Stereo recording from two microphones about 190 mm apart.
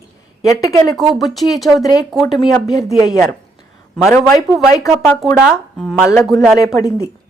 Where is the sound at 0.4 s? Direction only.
15° left (ahead or behind).